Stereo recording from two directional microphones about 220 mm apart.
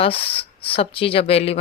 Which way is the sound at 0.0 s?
25° left (ahead or behind).